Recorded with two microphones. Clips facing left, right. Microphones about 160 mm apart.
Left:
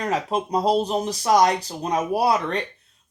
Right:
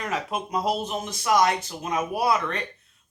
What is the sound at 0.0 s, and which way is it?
Speech, 35° left (ahead or behind).